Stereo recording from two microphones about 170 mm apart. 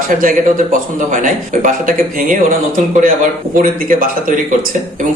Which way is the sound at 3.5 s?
55° right (ahead or behind).